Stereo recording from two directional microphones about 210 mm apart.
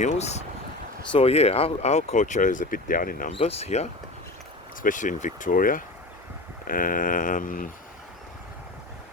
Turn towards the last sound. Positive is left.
turn(degrees=40)  # may be behind; listen again after turning